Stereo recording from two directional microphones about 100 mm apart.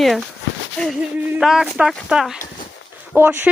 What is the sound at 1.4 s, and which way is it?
Speech, 5° right (ahead or behind).